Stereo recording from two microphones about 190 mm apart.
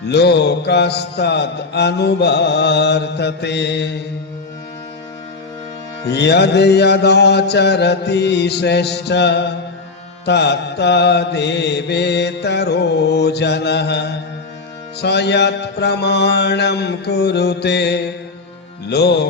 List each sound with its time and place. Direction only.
0.0 s mantra: 60° left (ahead or behind)
6.1 s mantra: 60° left (ahead or behind)